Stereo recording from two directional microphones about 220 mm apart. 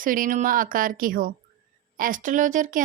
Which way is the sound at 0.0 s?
40° right (ahead or behind).